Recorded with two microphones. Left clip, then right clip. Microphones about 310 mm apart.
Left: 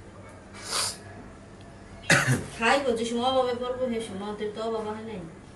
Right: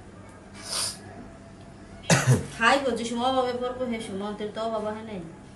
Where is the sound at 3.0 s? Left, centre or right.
Centre.